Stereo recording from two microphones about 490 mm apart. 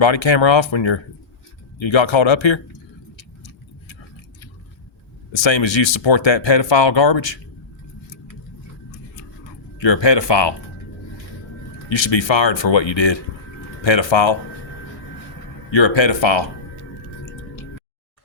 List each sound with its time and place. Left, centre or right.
0.0 s speech: left
5.3 s speech: left
9.8 s speech: left
11.9 s speech: left
15.7 s speech: left